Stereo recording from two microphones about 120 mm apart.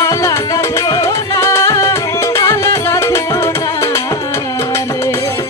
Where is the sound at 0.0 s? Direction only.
25° left (ahead or behind).